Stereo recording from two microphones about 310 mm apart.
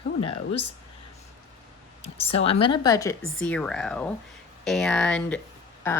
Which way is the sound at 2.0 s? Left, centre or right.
Centre.